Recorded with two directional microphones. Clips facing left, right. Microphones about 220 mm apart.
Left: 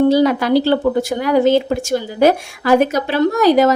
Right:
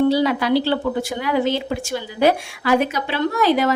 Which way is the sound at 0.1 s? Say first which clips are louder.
Left 4 dB; 45° left (ahead or behind).